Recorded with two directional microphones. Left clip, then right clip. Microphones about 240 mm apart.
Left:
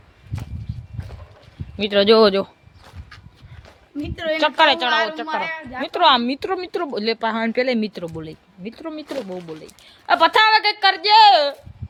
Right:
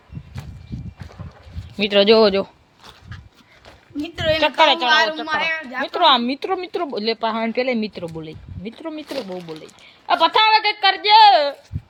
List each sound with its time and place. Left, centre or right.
1.7 s speech: centre
4.1 s a sound: right
4.4 s speech: centre
5.2 s a woman's voice: right
5.8 s speech: centre
9.6 s speech: centre